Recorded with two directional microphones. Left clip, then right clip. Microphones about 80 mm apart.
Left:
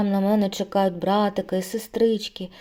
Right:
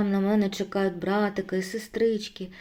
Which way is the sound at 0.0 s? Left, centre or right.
Left.